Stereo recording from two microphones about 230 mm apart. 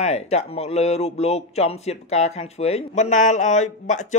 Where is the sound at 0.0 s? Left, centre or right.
Left.